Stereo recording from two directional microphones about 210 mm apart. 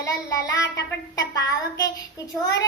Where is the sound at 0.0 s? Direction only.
15° left (ahead or behind).